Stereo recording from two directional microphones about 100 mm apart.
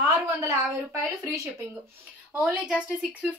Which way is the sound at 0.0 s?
30° right (ahead or behind).